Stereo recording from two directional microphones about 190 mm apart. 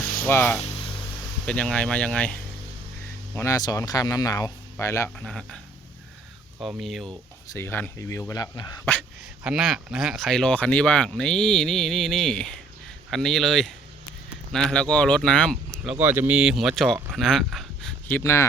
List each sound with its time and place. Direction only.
0.3 s speech: 10° left (ahead or behind)
3.3 s speech: 15° left (ahead or behind)
5.2 s speech: centre (ahead or behind)
6.6 s speech: centre (ahead or behind)
7.5 s speech: 10° left (ahead or behind)
8.8 s speech: 10° left (ahead or behind)
9.4 s speech: 5° right (ahead or behind)
18.2 s speech: 15° left (ahead or behind)